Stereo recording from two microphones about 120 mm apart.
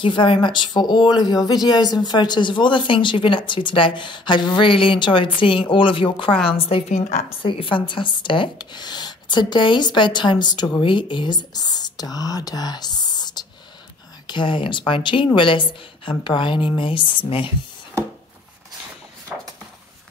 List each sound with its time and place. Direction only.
0.0 s a woman's voice: 45° left (ahead or behind); by 7.2 s 80° left
7.2 s a woman's voice: 50° left (ahead or behind)